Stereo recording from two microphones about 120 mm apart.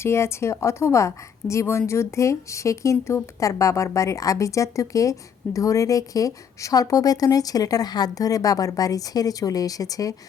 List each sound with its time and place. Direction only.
0.0 s a woman's voice: 20° left (ahead or behind)